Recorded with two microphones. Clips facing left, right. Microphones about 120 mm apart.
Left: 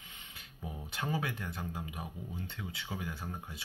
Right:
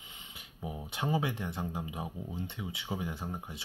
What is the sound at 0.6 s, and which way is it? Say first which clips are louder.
Speech: right 3 dB; 20° right (ahead or behind).